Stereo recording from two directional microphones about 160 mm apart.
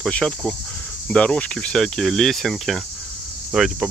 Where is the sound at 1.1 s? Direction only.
5° left (ahead or behind).